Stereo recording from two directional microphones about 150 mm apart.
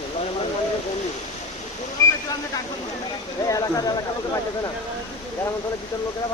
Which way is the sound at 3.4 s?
25° left (ahead or behind).